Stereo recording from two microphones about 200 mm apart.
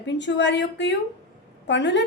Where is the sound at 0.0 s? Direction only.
65° left (ahead or behind).